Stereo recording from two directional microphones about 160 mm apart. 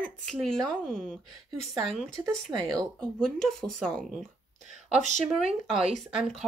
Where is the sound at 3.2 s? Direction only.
Centre (ahead or behind).